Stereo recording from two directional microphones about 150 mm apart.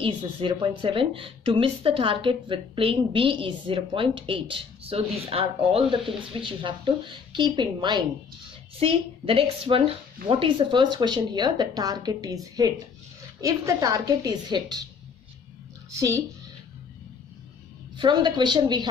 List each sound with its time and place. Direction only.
0.0 s a woman's voice: 35° right (ahead or behind)
17.9 s a woman's voice: 30° right (ahead or behind)